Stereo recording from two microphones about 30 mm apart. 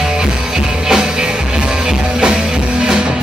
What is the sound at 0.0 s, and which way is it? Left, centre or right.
Music, right.